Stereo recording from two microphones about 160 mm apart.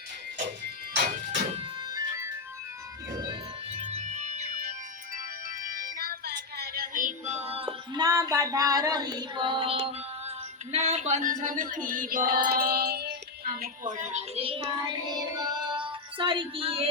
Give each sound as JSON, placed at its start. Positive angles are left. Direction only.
{"t": 1.9, "sound": "music", "side_deg": -25}
{"t": 3.8, "sound": "synthesizer", "side_deg": -45}
{"t": 5.6, "sound": "music", "side_deg": -65}
{"t": 8.0, "sound": "female singing", "side_deg": -20}